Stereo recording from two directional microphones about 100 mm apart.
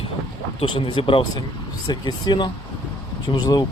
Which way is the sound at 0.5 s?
60° left (ahead or behind).